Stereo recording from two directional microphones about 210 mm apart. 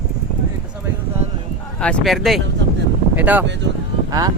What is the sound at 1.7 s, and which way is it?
A man's voice, 5° left (ahead or behind).